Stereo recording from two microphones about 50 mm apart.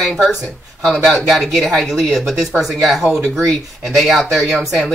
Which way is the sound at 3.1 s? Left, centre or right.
Right.